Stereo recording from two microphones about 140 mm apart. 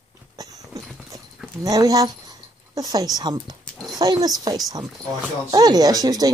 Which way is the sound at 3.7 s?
Centre (ahead or behind).